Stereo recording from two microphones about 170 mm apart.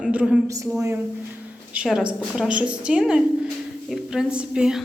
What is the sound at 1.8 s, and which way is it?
A woman's voice, 5° right (ahead or behind).